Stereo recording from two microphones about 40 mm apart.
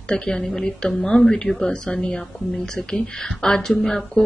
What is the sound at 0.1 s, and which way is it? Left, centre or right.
A woman's voice, centre.